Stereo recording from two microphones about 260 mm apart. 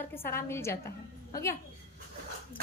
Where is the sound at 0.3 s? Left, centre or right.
Centre.